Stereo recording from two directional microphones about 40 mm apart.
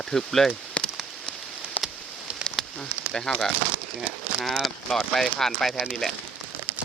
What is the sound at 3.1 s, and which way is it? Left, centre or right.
Speech, centre.